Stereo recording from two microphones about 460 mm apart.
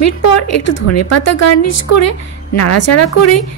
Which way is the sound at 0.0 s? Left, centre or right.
Left.